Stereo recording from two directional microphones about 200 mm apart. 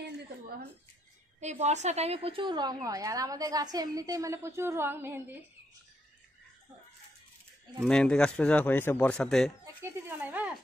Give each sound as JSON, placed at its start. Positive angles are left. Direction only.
{"t": 1.4, "sound": "a woman's voice", "side_deg": -35}
{"t": 7.8, "sound": "speech", "side_deg": 5}
{"t": 10.0, "sound": "speech", "side_deg": -10}